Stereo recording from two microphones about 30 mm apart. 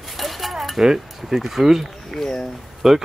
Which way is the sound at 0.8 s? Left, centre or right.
Centre.